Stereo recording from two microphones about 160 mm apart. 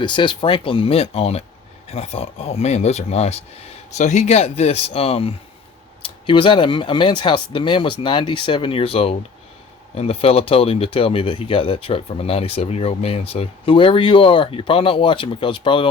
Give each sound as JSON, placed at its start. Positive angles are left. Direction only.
{"t": 0.0, "sound": "speech", "side_deg": 30}